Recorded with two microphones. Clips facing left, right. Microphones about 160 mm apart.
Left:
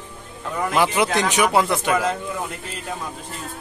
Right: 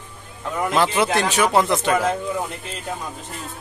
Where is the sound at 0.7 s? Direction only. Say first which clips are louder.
Even; 15° left (ahead or behind).